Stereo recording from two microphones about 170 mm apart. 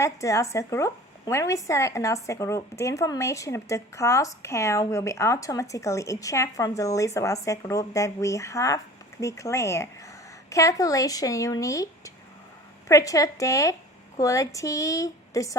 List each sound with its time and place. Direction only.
0.0 s a woman's voice: 20° left (ahead or behind)